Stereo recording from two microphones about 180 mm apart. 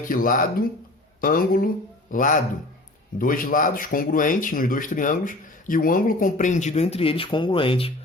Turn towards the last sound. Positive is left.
turn(degrees=30)  # may be behind; listen again after turning